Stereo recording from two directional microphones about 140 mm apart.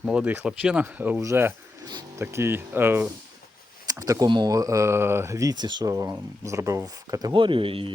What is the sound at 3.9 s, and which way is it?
Speech, 25° right (ahead or behind).